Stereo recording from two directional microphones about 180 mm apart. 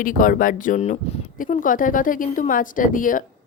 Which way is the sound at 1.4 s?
50° left (ahead or behind).